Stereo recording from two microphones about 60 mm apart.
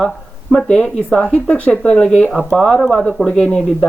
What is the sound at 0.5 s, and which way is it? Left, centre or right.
Speech, centre.